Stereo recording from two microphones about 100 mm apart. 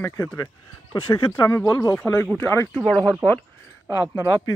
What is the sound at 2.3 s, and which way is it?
Speech, 25° left (ahead or behind).